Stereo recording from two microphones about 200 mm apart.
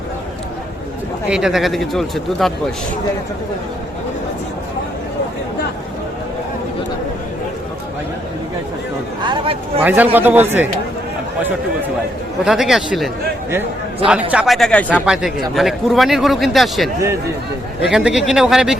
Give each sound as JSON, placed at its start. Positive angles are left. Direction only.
{"t": 1.3, "sound": "speech", "side_deg": -5}
{"t": 9.2, "sound": "a sound", "side_deg": -25}
{"t": 9.8, "sound": "speech", "side_deg": -10}
{"t": 12.5, "sound": "speech", "side_deg": 0}
{"t": 14.1, "sound": "speech", "side_deg": -5}